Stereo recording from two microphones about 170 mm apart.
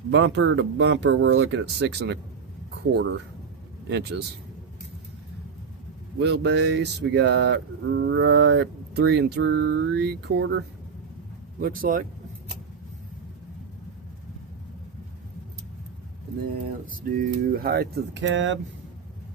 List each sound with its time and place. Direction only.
0.1 s speech: 90° right
6.1 s speech: 90° right
11.6 s speech: 55° right (ahead or behind)
16.8 s speech: 55° right (ahead or behind); by 18.6 s 90° right